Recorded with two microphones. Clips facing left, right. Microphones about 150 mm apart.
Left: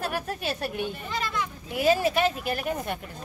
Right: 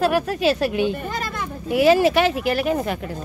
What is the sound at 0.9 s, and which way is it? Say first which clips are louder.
Speech: right 3 dB; 50° right (ahead or behind).